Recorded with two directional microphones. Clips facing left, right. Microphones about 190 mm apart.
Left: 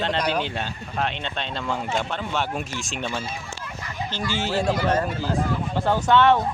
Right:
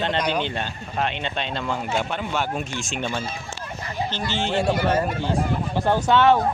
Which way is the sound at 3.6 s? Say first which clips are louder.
Right 5 dB; 30° right (ahead or behind).